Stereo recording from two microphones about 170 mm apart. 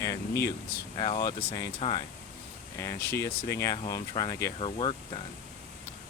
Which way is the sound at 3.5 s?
20° left (ahead or behind).